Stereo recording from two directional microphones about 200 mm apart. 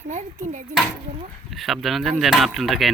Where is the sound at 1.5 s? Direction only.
Centre (ahead or behind).